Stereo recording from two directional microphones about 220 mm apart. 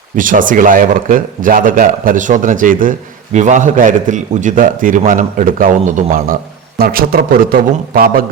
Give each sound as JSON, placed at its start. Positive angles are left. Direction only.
{"t": 0.2, "sound": "a man's voice", "side_deg": -35}